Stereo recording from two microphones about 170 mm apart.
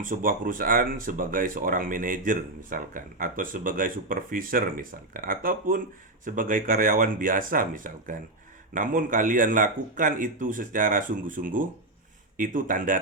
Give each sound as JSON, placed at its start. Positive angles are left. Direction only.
{"t": 0.0, "sound": "speech", "side_deg": -55}